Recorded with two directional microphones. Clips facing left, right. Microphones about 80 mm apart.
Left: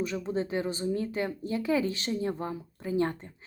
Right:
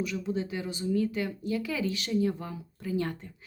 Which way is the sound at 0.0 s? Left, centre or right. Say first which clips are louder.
Left 1 dB; left.